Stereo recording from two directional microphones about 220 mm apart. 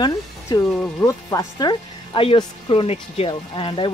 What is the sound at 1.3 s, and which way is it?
Speech, 20° left (ahead or behind).